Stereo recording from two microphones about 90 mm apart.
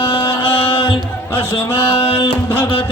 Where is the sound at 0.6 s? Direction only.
90° left.